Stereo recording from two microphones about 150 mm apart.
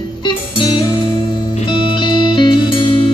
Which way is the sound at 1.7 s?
35° left (ahead or behind).